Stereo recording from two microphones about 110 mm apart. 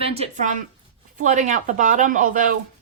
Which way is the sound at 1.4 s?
90° right.